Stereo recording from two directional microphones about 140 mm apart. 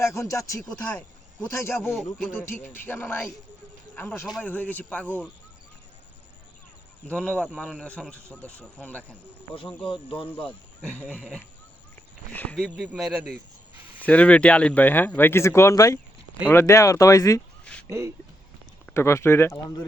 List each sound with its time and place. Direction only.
0.0 s speech: 20° left (ahead or behind)
0.7 s speech: 10° left (ahead or behind)
7.1 s speech: 5° left (ahead or behind)
9.8 s speech: 40° left (ahead or behind)
10.8 s speech: 10° left (ahead or behind)
12.3 s speech: 10° left (ahead or behind)
12.7 s speech: 10° right (ahead or behind)
14.0 s speech: 10° left (ahead or behind)
17.8 s speech: 20° right (ahead or behind)
18.9 s speech: 20° left (ahead or behind)